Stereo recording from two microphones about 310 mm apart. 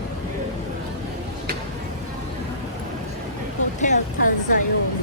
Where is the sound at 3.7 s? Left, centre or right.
Left.